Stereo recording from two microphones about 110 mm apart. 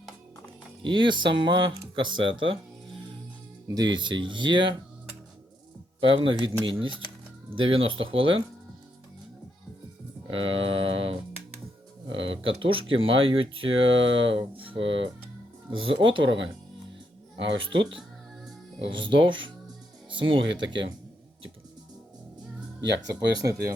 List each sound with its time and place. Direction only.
0.8 s speech: 50° right (ahead or behind)
3.8 s speech: 45° right (ahead or behind)
6.0 s speech: 50° right (ahead or behind)
10.2 s speech: 55° right (ahead or behind)
17.6 s speech: 50° right (ahead or behind)
23.4 s speech: 30° right (ahead or behind)